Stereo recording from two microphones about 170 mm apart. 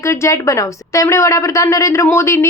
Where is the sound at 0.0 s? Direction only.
15° left (ahead or behind).